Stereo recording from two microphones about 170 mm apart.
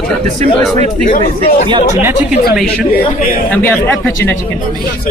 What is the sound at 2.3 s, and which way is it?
Speech, 60° left (ahead or behind).